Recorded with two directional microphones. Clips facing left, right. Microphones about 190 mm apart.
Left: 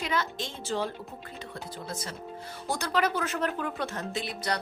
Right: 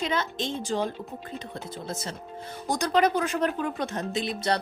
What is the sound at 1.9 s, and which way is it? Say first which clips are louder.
A woman's voice: right 3 dB; 25° right (ahead or behind).